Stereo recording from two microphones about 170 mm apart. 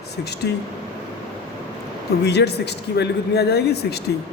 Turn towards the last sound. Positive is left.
turn(degrees=75)  # may be behind; listen again after turning